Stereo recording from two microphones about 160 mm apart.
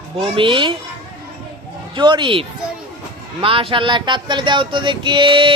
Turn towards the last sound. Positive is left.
turn(degrees=-30)  # may be behind; listen again after turning